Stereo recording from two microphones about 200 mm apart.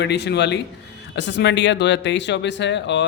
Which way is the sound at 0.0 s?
60° left (ahead or behind).